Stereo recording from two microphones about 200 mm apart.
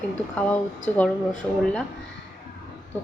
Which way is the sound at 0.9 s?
10° left (ahead or behind).